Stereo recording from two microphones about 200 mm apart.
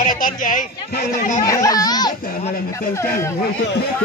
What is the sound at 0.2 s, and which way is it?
Speech, 40° left (ahead or behind).